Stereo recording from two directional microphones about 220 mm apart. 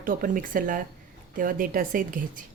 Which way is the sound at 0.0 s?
40° right (ahead or behind).